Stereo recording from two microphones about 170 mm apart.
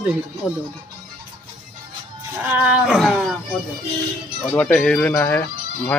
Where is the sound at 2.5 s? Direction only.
5° right (ahead or behind).